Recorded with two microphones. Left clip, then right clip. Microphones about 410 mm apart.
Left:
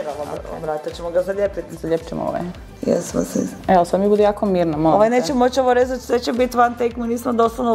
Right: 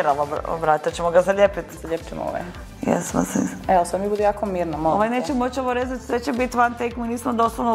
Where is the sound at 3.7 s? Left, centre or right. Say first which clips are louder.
Left 4 dB; left.